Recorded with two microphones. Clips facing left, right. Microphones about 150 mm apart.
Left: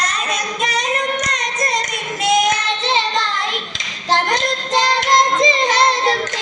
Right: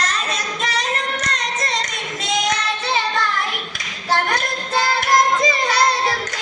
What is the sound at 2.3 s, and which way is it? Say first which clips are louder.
Child singing: left 3 dB; 20° left (ahead or behind).